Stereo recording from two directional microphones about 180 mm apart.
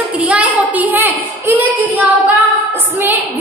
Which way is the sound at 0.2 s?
10° right (ahead or behind).